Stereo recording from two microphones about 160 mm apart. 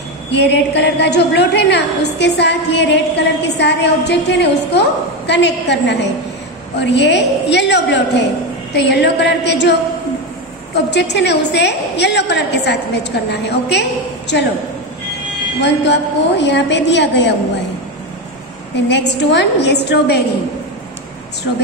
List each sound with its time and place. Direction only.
0.3 s a woman's voice: 90° left
10.9 s a woman's voice: 90° left
15.6 s a woman's voice: 90° left
18.9 s a woman's voice: 90° left